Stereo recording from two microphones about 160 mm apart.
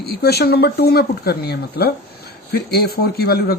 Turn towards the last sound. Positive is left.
turn(degrees=75)  # may be behind; listen again after turning